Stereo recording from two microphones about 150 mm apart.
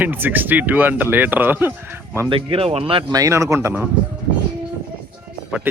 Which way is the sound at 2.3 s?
40° right (ahead or behind).